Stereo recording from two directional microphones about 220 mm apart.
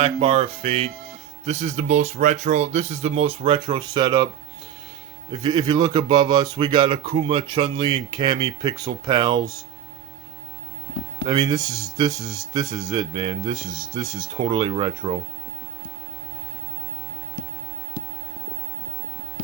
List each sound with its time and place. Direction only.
0.0 s speech: 25° right (ahead or behind)
5.3 s speech: 20° right (ahead or behind)
11.3 s speech: 15° right (ahead or behind)